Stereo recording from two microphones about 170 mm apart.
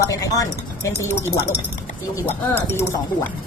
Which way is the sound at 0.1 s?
20° left (ahead or behind).